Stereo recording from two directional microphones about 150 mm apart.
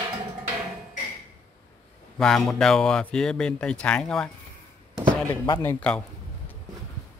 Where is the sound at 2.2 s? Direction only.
5° left (ahead or behind).